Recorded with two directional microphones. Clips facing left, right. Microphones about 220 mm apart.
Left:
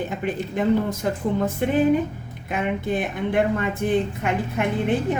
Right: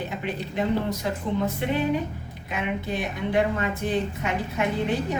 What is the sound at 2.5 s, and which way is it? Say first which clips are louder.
A woman's voice: left 4 dB; 50° left (ahead or behind).